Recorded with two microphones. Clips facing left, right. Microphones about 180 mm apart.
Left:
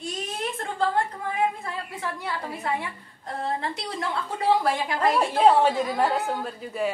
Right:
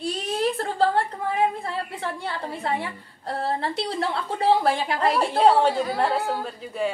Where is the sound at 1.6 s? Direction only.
30° right (ahead or behind).